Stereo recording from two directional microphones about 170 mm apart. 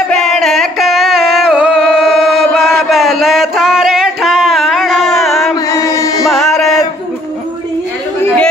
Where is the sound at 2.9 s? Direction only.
Centre (ahead or behind).